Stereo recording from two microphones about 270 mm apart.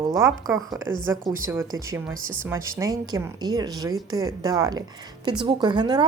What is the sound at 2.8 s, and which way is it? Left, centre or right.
Speech, centre.